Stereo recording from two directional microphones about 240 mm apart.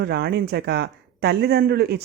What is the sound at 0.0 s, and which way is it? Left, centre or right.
Speech, right.